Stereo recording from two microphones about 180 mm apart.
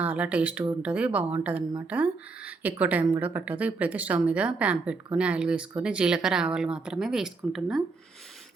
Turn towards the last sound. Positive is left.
turn(degrees=0)  # may be behind; listen again after turning